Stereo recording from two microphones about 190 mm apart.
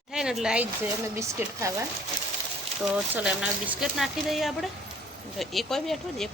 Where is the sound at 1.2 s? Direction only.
15° right (ahead or behind).